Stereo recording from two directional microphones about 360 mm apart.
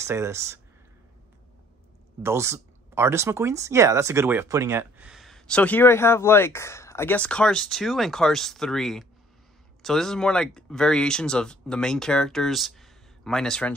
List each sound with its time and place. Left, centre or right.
0.0 s speech: centre
2.2 s speech: centre